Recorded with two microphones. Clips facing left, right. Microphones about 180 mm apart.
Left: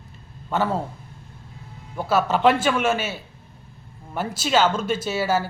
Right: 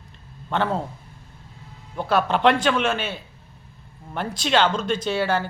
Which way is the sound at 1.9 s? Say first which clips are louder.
Even; 5° left (ahead or behind).